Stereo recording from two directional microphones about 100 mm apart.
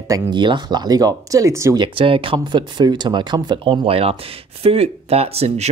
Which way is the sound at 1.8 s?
65° right (ahead or behind).